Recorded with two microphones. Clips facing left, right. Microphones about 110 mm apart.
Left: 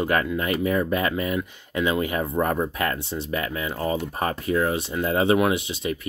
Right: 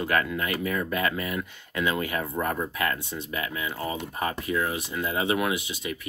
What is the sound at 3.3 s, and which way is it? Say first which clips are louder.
Speech: left 4 dB; 40° left (ahead or behind).